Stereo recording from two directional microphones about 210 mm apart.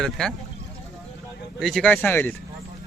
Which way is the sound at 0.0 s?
5° left (ahead or behind).